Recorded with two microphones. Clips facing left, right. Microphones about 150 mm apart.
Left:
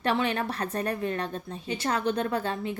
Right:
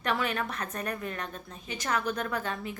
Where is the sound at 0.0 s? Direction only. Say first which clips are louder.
Left 4 dB; 30° left (ahead or behind).